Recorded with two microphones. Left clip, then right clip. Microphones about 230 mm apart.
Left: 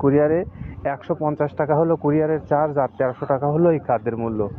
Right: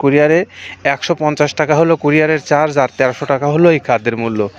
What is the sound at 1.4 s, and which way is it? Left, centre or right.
Speech, right.